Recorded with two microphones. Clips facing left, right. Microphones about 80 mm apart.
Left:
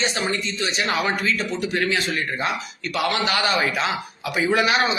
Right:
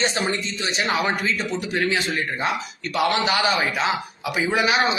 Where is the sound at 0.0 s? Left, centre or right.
Right.